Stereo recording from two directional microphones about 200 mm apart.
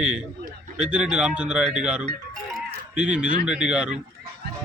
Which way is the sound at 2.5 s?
5° right (ahead or behind).